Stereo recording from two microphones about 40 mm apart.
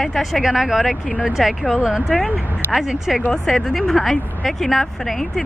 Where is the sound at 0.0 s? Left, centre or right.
Centre.